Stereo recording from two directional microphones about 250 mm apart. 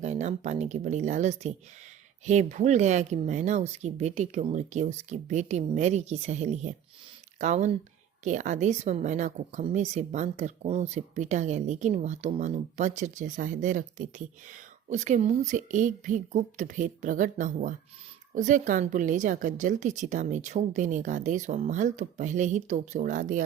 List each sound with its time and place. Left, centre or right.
0.0 s speech: right